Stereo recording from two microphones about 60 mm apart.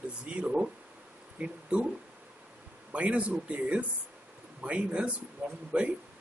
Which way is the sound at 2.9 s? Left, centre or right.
Right.